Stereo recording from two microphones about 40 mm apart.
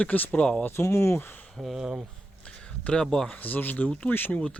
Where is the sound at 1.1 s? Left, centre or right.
Left.